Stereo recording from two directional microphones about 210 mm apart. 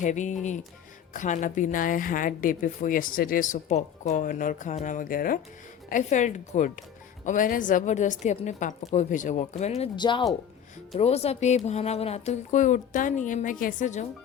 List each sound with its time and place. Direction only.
0.0 s a woman's voice: 35° left (ahead or behind)